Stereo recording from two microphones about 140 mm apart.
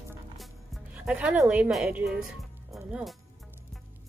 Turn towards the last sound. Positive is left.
turn(degrees=-5)  # may be behind; listen again after turning